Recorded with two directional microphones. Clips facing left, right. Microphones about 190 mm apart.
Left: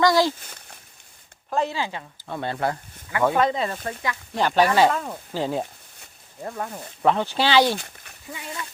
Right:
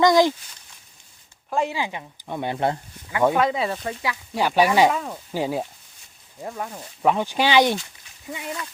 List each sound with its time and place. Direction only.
0.0 s speech: 20° right (ahead or behind)
0.4 s a sound: 60° left (ahead or behind)
1.5 s speech: 10° right (ahead or behind)
3.3 s speech: 5° right (ahead or behind)
7.8 s speech: 55° left (ahead or behind)